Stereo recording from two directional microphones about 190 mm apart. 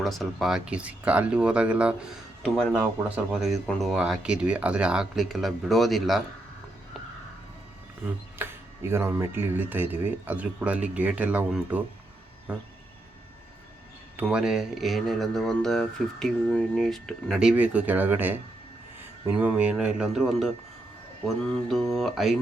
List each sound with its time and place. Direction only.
0.0 s speech: centre (ahead or behind)
8.4 s speech: 15° right (ahead or behind)
14.2 s speech: 5° right (ahead or behind)
21.7 s speech: centre (ahead or behind)